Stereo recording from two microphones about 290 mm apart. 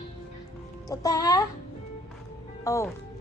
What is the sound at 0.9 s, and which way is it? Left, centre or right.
Speech, centre.